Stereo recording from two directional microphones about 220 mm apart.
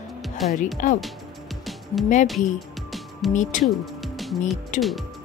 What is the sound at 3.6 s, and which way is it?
Music, centre (ahead or behind).